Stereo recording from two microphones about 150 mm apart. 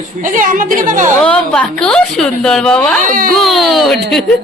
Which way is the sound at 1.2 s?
5° left (ahead or behind).